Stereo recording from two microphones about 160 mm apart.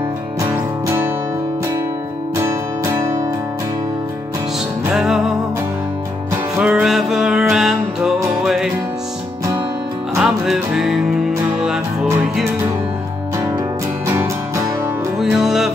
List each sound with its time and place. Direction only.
2.3 s music: 15° right (ahead or behind)
4.8 s music: 5° right (ahead or behind)
6.6 s music: 5° right (ahead or behind)
10.1 s music: centre (ahead or behind)
14.0 s music: 20° right (ahead or behind)
15.1 s music: 5° right (ahead or behind)